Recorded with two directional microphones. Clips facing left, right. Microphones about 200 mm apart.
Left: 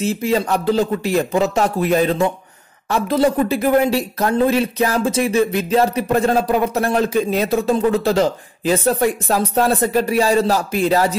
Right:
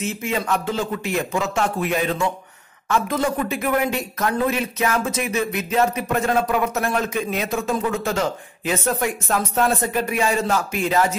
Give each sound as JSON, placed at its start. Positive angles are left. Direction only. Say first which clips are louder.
{"t": 0.0, "sound": "speech", "louder": "left 6 dB", "side_deg": 35}